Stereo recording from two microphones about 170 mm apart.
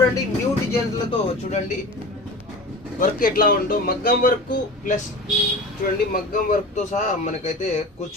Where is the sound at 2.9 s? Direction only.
55° left (ahead or behind).